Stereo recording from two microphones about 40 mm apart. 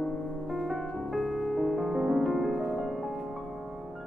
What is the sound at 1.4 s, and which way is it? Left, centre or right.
Music, centre.